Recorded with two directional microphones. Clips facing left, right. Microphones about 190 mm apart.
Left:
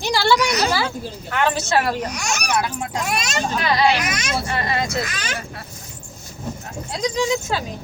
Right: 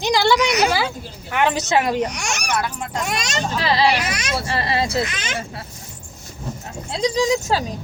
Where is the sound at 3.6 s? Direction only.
30° right (ahead or behind).